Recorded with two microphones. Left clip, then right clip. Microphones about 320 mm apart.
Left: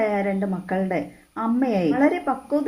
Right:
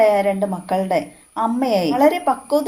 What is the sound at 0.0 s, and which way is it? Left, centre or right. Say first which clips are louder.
A woman's voice: right 8 dB; right.